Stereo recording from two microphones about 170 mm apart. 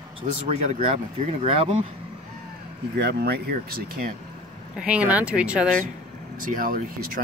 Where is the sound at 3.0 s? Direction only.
70° right (ahead or behind).